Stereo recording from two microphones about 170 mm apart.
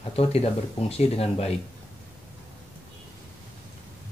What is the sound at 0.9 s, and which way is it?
Speech, 35° left (ahead or behind).